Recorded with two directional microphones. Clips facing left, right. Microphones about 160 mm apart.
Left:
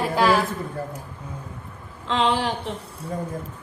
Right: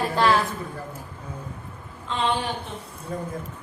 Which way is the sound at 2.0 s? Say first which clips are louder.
Left 3 dB; 90° left.